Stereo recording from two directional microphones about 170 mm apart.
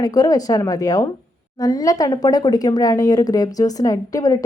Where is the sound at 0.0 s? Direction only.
20° left (ahead or behind).